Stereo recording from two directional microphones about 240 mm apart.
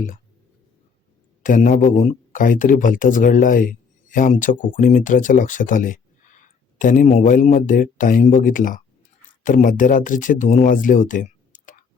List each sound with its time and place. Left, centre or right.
1.4 s speech: left